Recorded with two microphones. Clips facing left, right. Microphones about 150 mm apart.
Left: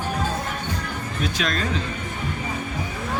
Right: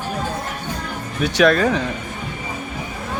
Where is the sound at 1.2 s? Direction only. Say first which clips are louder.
Right 11 dB; 75° right (ahead or behind).